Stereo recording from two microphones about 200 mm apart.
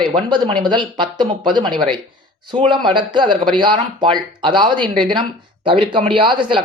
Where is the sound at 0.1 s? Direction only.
25° right (ahead or behind).